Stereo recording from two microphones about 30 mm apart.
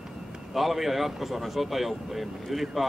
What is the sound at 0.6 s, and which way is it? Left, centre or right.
Speech, centre.